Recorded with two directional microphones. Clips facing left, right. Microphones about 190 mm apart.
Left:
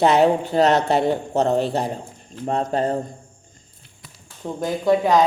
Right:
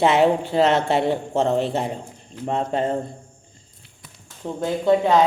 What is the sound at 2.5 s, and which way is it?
Speech, 40° left (ahead or behind).